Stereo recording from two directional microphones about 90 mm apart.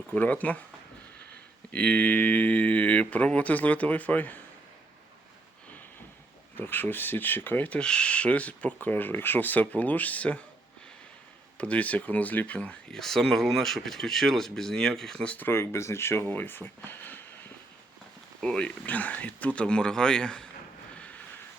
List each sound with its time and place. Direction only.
0.1 s speech: 20° left (ahead or behind)
1.7 s speech: 15° left (ahead or behind)
6.6 s speech: 20° left (ahead or behind)
11.5 s speech: 15° left (ahead or behind)
18.3 s speech: 10° left (ahead or behind)